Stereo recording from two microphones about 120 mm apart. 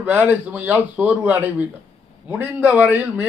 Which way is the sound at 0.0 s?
15° right (ahead or behind).